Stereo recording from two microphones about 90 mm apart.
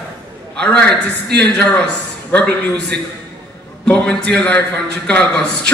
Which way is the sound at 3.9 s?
10° left (ahead or behind).